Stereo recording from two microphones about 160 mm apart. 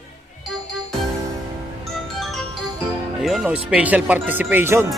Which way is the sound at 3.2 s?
5° right (ahead or behind).